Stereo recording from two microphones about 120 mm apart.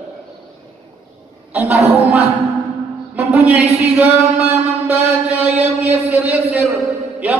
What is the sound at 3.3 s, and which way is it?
Speech, 15° right (ahead or behind).